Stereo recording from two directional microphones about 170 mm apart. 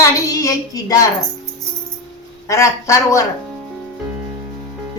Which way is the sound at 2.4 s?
15° left (ahead or behind).